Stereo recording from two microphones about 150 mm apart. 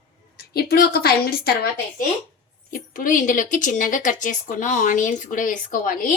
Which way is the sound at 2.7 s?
65° left (ahead or behind).